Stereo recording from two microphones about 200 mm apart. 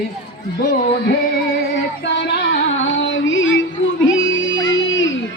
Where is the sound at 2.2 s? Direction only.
65° left (ahead or behind).